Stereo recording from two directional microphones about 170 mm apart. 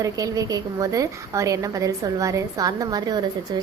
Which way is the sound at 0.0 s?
20° right (ahead or behind).